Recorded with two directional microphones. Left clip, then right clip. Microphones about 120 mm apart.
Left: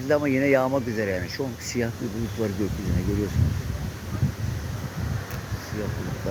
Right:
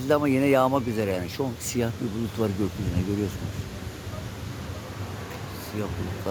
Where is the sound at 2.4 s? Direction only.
30° right (ahead or behind).